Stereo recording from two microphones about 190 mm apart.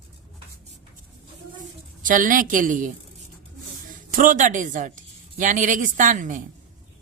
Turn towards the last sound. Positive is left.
turn(degrees=-45)  # may be behind; listen again after turning